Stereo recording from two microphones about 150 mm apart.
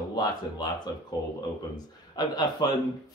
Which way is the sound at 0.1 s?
30° left (ahead or behind).